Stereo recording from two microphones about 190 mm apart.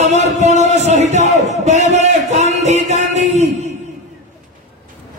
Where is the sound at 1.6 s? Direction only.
40° right (ahead or behind).